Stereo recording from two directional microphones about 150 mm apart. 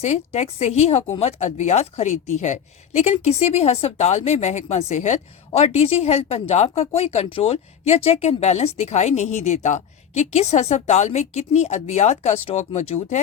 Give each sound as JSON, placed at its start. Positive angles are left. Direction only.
{"t": 0.0, "sound": "speech", "side_deg": 45}